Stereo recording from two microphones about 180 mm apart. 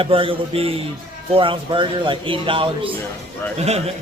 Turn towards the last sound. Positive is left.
turn(degrees=-35)  # may be behind; listen again after turning